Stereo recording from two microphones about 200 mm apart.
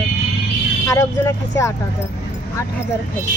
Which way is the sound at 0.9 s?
15° left (ahead or behind).